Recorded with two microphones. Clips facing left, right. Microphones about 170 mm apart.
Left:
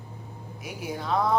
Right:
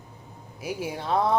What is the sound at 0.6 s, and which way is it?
Speech, 30° right (ahead or behind).